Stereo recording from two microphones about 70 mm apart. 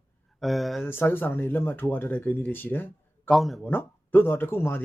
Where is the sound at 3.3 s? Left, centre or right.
Centre.